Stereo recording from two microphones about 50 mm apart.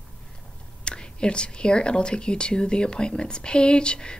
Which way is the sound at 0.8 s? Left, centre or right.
Centre.